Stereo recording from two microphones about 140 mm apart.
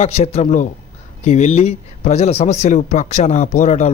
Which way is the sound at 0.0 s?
50° left (ahead or behind).